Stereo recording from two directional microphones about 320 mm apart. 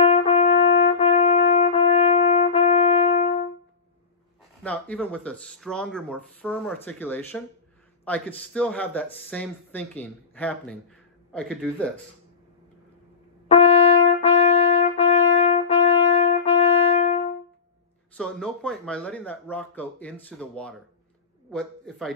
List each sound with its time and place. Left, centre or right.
0.0 s brass instrument: centre
4.6 s speech: centre
13.5 s brass instrument: centre
18.1 s speech: centre